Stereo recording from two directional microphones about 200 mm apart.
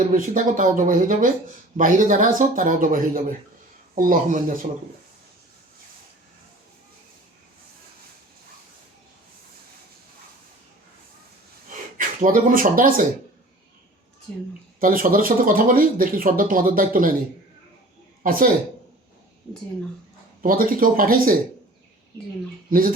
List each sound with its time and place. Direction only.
0.0 s speech: 40° right (ahead or behind)
11.9 s speech: 40° right (ahead or behind)
14.8 s speech: 45° right (ahead or behind)
18.2 s speech: 45° right (ahead or behind)
20.4 s speech: 45° right (ahead or behind)